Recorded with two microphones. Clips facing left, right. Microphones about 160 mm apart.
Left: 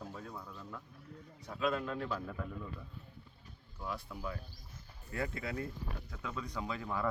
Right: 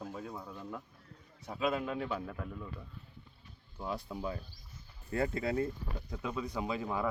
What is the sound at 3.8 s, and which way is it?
Speech, 25° right (ahead or behind).